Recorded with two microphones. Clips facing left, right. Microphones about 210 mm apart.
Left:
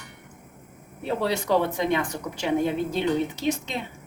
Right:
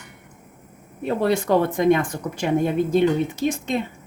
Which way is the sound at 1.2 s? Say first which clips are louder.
Right 4 dB; 50° right (ahead or behind).